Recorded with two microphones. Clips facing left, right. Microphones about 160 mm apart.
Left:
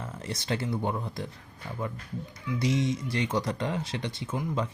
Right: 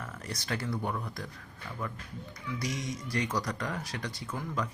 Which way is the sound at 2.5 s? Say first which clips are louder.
Left 8 dB; 25° left (ahead or behind).